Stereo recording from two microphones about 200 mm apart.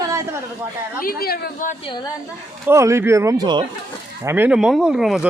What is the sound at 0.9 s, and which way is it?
Speech, 50° left (ahead or behind).